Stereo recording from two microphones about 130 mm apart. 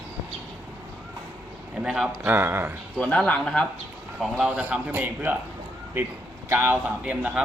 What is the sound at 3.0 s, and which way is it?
Speech, 10° left (ahead or behind).